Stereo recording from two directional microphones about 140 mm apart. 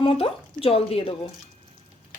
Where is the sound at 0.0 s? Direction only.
40° left (ahead or behind).